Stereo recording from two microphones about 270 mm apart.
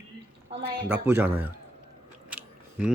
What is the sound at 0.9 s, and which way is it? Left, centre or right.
Speech, centre.